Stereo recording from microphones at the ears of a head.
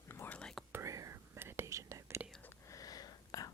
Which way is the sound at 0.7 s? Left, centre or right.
Right.